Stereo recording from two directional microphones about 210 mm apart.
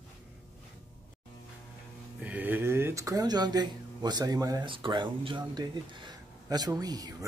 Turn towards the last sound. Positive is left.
turn(degrees=-20)  # may be behind; listen again after turning